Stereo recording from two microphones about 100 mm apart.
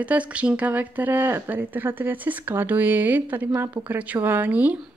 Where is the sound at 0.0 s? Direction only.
15° right (ahead or behind).